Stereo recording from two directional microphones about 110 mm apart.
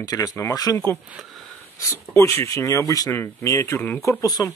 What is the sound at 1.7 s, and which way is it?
Speech, 30° left (ahead or behind).